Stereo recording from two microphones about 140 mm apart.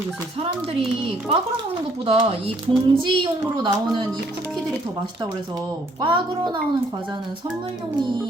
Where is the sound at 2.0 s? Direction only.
45° right (ahead or behind).